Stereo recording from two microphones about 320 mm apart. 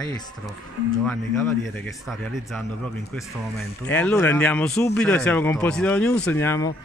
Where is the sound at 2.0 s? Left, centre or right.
Centre.